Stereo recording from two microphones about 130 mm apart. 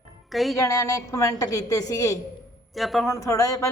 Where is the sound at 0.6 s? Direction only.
25° left (ahead or behind).